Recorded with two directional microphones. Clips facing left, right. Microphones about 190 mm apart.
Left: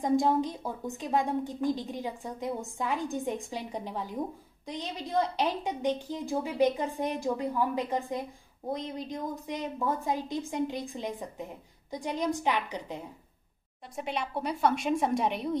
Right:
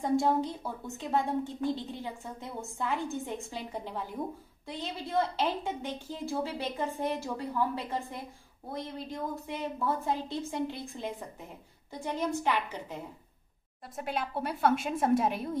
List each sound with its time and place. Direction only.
0.0 s a woman's voice: 15° left (ahead or behind)
13.9 s a woman's voice: centre (ahead or behind)